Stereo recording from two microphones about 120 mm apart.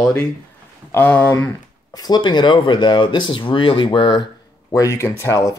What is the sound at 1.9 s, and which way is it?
Speech, 35° left (ahead or behind).